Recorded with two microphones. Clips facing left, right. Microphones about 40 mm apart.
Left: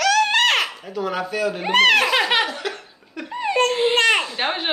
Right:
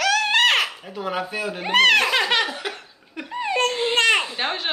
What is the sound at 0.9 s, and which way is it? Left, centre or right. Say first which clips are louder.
Speech: left 3 dB; centre.